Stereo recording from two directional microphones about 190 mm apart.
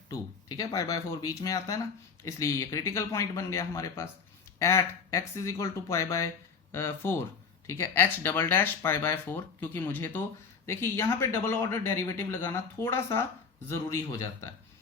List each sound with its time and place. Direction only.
0.1 s speech: 20° left (ahead or behind)